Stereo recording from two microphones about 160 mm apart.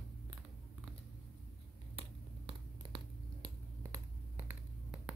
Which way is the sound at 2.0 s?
30° right (ahead or behind).